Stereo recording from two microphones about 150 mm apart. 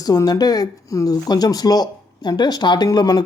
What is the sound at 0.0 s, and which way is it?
Speech, 25° left (ahead or behind).